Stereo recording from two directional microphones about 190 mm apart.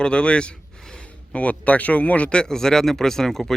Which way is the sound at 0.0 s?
5° left (ahead or behind).